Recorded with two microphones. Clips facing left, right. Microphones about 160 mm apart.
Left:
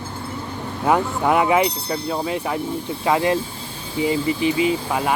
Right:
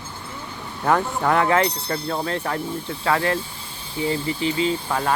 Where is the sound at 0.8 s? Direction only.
10° left (ahead or behind).